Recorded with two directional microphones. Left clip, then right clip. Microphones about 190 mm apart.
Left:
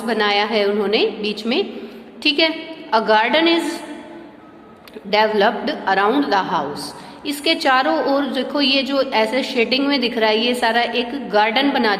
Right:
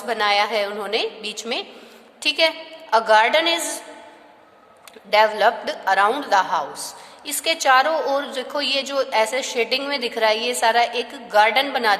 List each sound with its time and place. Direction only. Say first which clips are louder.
0.0 s a woman's voice: left 1 dB; 30° right (ahead or behind)
5.1 s a woman's voice: left 1 dB; 30° right (ahead or behind)